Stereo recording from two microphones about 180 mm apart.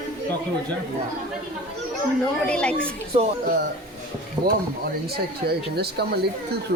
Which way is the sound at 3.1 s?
30° right (ahead or behind).